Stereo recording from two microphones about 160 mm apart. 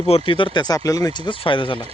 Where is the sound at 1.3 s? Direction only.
30° left (ahead or behind).